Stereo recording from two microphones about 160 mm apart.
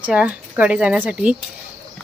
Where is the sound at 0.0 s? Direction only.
5° right (ahead or behind).